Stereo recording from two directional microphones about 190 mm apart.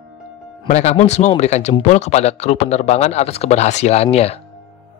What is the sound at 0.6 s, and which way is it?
A man's voice, 35° left (ahead or behind).